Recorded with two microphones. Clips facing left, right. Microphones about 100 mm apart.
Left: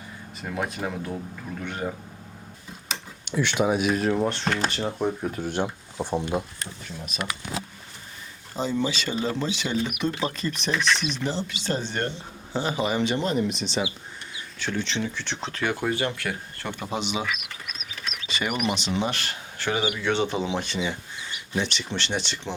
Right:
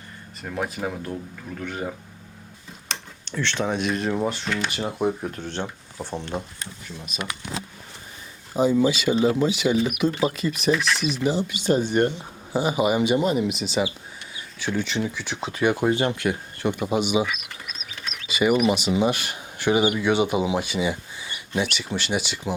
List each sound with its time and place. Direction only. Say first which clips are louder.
0.4 s speech: right 1 dB; centre (ahead or behind)
2.9 s speech: left 3 dB; 10° left (ahead or behind); by 4.4 s 5° right (ahead or behind)
4.4 s speech: left 1 dB; 40° left (ahead or behind)
4.7 s speech: right 2 dB; 10° right (ahead or behind)
5.3 s speech: left 3 dB; 10° left (ahead or behind)
7.0 s speech: left 1 dB; centre (ahead or behind)
8.5 s speech: right 7 dB; 10° right (ahead or behind)
18.3 s speech: right 8 dB; 10° right (ahead or behind)